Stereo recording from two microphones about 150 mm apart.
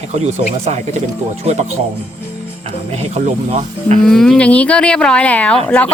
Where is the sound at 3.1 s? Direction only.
45° right (ahead or behind).